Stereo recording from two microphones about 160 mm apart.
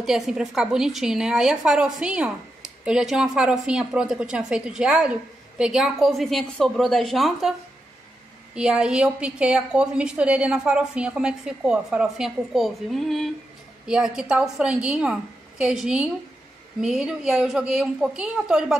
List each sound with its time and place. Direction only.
0.0 s a woman's voice: 5° right (ahead or behind)
8.5 s a woman's voice: 5° right (ahead or behind)